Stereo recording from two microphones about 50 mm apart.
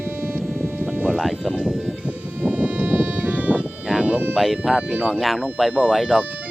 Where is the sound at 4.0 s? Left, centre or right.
Right.